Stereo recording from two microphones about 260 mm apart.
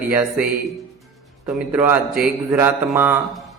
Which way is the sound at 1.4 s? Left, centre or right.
Centre.